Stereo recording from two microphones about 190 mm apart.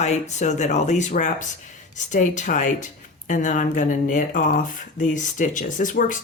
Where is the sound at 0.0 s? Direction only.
35° left (ahead or behind).